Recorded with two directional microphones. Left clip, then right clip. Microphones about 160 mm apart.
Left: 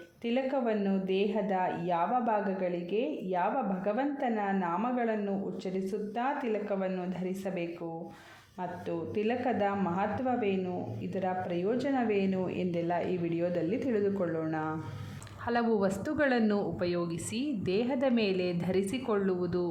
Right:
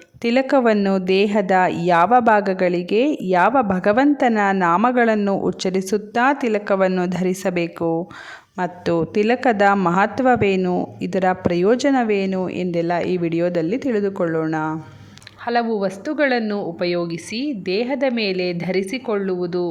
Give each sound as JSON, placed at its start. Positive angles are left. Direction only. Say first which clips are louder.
{"t": 0.2, "sound": "a woman's voice", "louder": "right 14 dB", "side_deg": -55}
{"t": 9.9, "sound": "speech", "louder": "right 15 dB", "side_deg": -65}
{"t": 15.4, "sound": "a woman's voice", "louder": "right 9 dB", "side_deg": -20}